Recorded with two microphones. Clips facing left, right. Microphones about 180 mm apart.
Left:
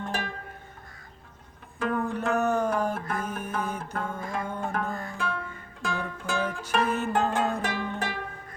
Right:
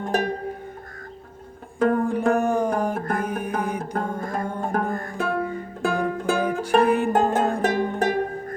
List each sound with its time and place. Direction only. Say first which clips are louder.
0.1 s music: right 14 dB; 45° right (ahead or behind)
1.8 s music: right 8 dB; 40° right (ahead or behind)
2.3 s a sound: right 4 dB; 10° right (ahead or behind)
3.0 s music: right 6 dB; 50° right (ahead or behind)
3.2 s music: right 5 dB; 15° right (ahead or behind)
3.9 s music: right 5 dB; 40° right (ahead or behind)